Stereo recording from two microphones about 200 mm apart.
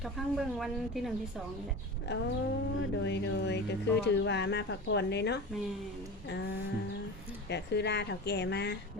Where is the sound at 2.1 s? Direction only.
60° left (ahead or behind).